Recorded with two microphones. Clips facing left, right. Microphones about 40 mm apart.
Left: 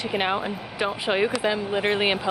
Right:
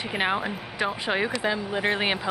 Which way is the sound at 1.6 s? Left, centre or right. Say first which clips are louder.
Left 3 dB; left.